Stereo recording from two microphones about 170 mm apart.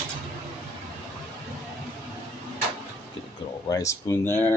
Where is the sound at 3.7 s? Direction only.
20° left (ahead or behind).